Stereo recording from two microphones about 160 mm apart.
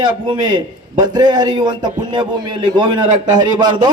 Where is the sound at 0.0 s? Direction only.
25° right (ahead or behind).